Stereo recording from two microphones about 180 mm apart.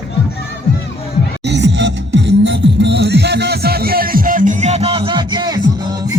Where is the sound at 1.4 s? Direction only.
75° right (ahead or behind).